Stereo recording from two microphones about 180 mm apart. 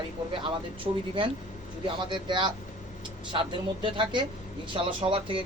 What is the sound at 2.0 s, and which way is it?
Speech, 25° right (ahead or behind).